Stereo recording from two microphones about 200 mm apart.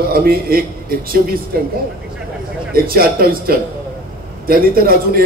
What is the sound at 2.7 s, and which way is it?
A man's voice, 50° right (ahead or behind).